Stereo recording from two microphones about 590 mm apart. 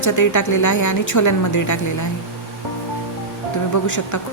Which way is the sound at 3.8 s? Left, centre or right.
Left.